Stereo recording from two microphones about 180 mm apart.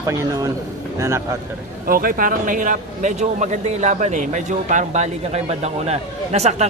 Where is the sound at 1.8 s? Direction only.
55° right (ahead or behind).